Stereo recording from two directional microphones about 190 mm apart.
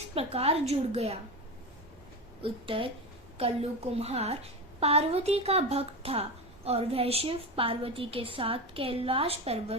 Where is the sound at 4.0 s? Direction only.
35° right (ahead or behind).